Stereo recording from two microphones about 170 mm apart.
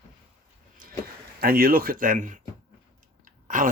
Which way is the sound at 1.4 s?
65° right (ahead or behind).